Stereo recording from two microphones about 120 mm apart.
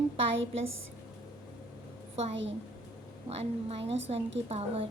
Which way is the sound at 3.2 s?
55° right (ahead or behind).